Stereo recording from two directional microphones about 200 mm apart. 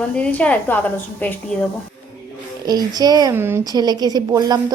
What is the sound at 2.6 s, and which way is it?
Speech, 20° right (ahead or behind).